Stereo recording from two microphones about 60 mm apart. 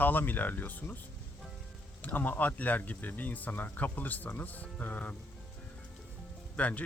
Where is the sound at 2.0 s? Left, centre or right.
Left.